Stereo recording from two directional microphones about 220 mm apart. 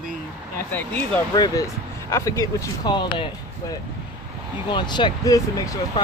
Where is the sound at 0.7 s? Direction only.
10° left (ahead or behind).